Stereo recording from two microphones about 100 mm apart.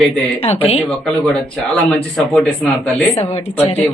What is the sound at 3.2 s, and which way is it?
Speech, 90° left.